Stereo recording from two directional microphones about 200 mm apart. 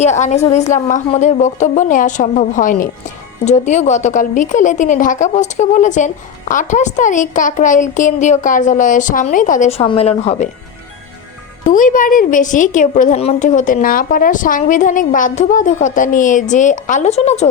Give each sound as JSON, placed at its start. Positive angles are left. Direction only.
{"t": 0.0, "sound": "a woman's voice", "side_deg": 35}
{"t": 11.6, "sound": "a woman's voice", "side_deg": 40}